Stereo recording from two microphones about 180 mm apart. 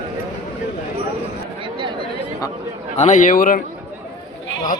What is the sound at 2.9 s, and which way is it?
Speech, 40° left (ahead or behind).